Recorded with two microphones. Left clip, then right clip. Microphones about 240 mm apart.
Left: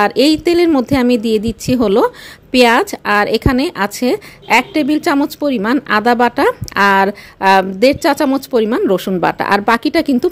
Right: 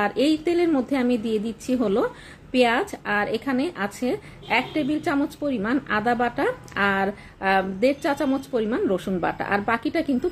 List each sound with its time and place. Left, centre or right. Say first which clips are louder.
0.0 s a woman's voice: left 10 dB; left